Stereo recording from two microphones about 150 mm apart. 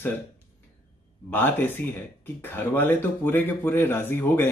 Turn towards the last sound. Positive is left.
turn(degrees=15)  # may be behind; listen again after turning